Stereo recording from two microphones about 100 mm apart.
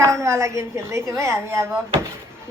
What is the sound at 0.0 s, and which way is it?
A woman's voice, 30° right (ahead or behind).